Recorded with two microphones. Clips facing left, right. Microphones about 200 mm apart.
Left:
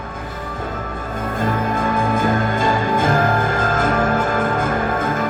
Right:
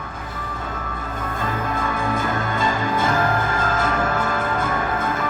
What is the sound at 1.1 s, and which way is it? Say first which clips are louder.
Music: left 6 dB; 50° left (ahead or behind).